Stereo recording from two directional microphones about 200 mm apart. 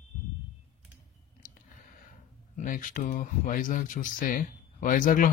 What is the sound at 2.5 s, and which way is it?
Speech, 40° left (ahead or behind).